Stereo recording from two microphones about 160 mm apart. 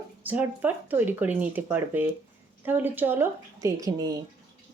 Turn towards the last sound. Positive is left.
turn(degrees=-20)  # may be behind; listen again after turning